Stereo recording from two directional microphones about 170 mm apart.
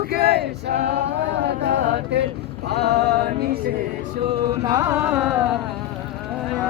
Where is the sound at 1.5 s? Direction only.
80° right.